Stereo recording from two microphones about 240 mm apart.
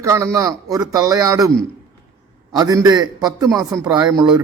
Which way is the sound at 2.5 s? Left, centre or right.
Centre.